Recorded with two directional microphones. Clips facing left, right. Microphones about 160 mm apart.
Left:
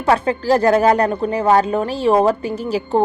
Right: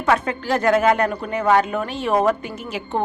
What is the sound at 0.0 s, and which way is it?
A woman's voice, 35° left (ahead or behind).